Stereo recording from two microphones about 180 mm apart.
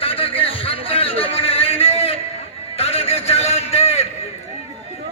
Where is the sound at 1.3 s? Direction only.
35° left (ahead or behind).